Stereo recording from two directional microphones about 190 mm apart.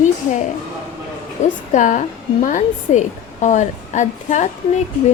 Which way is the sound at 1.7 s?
40° left (ahead or behind).